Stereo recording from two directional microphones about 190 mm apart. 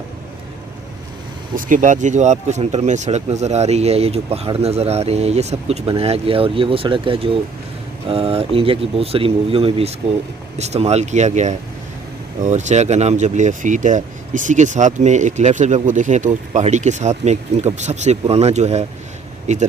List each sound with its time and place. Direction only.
1.5 s speech: 45° right (ahead or behind)